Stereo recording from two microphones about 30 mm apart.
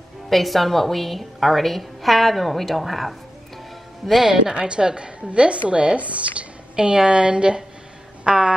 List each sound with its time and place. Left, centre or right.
0.3 s a woman's voice: centre
4.6 s a woman's voice: right
5.9 s speech: right
6.7 s a woman's voice: right
8.3 s music: right